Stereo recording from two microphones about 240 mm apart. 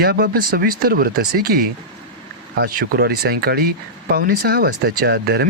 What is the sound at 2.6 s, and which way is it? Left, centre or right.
Speech, right.